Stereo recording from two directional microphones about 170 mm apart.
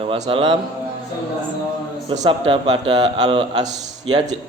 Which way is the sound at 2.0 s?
25° right (ahead or behind).